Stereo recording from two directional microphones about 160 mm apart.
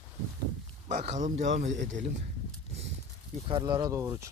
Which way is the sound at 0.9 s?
45° right (ahead or behind).